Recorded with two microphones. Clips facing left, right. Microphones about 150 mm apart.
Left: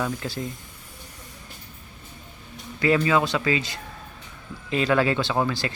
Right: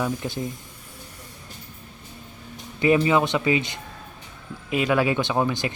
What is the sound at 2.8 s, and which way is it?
Speech, 20° right (ahead or behind).